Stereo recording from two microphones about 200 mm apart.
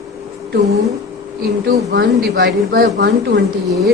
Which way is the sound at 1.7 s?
55° right (ahead or behind).